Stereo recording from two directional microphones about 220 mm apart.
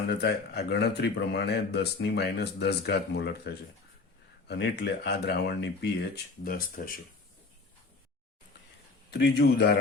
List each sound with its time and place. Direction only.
0.1 s a man's voice: 50° left (ahead or behind)
9.1 s a man's voice: 50° left (ahead or behind)